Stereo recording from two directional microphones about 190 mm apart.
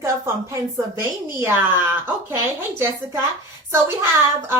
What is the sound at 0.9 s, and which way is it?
A woman's voice, 15° right (ahead or behind).